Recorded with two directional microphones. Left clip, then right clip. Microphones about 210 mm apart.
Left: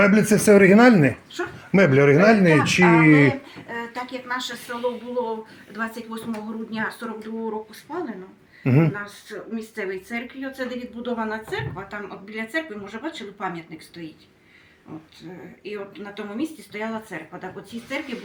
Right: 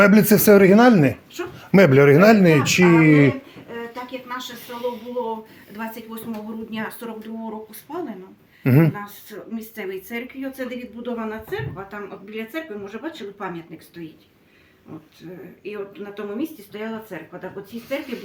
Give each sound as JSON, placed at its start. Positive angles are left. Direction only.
{"t": 0.0, "sound": "speech", "side_deg": -25}
{"t": 0.6, "sound": "speech", "side_deg": -5}
{"t": 1.3, "sound": "speech", "side_deg": -20}
{"t": 3.7, "sound": "a sound", "side_deg": 5}
{"t": 4.7, "sound": "speech", "side_deg": -10}
{"t": 6.7, "sound": "speech", "side_deg": -35}
{"t": 8.6, "sound": "speech", "side_deg": -20}
{"t": 9.0, "sound": "speech", "side_deg": -35}
{"t": 10.4, "sound": "speech", "side_deg": -15}
{"t": 11.0, "sound": "a woman's voice", "side_deg": 0}
{"t": 16.1, "sound": "speech", "side_deg": 5}